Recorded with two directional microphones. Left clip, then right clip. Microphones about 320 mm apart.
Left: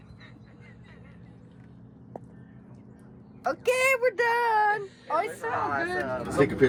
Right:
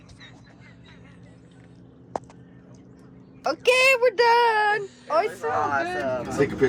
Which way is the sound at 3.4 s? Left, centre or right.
Right.